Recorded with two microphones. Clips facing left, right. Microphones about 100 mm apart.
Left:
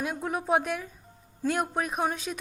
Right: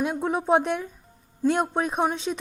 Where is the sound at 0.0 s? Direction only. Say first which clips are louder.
Right 5 dB; 25° right (ahead or behind).